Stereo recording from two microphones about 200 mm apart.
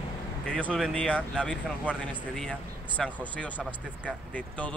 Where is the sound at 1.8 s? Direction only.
5° right (ahead or behind).